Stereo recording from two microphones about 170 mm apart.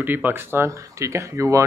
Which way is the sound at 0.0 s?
10° right (ahead or behind).